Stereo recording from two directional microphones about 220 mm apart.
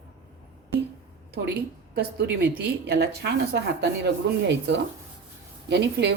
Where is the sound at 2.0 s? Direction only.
50° right (ahead or behind).